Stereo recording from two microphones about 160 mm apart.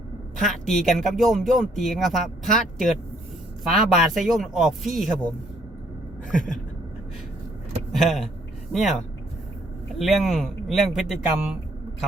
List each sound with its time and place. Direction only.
0.4 s speech: centre (ahead or behind)
6.3 s a sound: 55° left (ahead or behind)
7.9 s speech: centre (ahead or behind)